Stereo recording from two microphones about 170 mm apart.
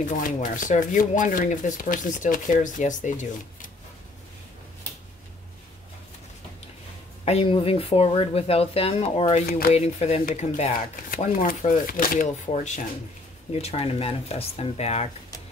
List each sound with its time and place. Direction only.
0.1 s speech: 50° left (ahead or behind)
7.2 s speech: 35° left (ahead or behind)
11.2 s speech: 50° left (ahead or behind)
12.4 s speech: 45° left (ahead or behind)